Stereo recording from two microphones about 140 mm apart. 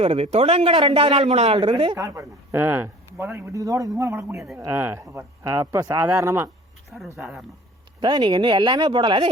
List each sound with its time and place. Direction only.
0.0 s a man's voice: 45° right (ahead or behind)
2.0 s speech: 25° right (ahead or behind)
7.2 s speech: 5° right (ahead or behind)
8.0 s speech: 35° right (ahead or behind)